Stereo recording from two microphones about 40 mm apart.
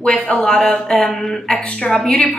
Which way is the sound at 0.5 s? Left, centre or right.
Centre.